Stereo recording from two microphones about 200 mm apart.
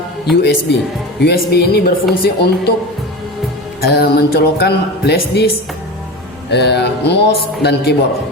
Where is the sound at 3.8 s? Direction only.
55° left (ahead or behind).